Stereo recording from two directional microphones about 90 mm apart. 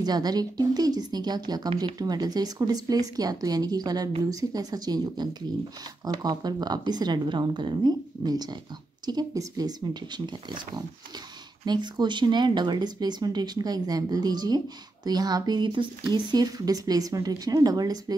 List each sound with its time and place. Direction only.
0.0 s speech: 50° right (ahead or behind)